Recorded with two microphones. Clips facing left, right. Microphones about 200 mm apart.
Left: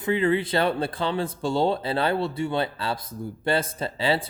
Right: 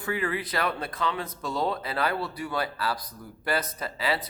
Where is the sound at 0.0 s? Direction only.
25° left (ahead or behind).